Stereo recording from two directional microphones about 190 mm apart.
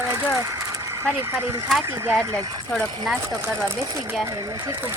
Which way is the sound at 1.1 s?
10° right (ahead or behind).